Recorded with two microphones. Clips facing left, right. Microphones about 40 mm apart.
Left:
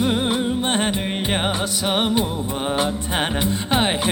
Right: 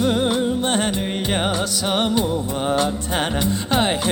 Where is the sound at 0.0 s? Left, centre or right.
Left.